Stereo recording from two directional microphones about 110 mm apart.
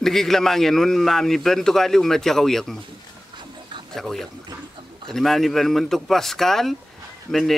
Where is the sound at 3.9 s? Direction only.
5° left (ahead or behind).